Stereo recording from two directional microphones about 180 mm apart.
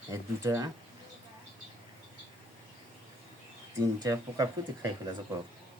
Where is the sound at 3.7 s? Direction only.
20° right (ahead or behind).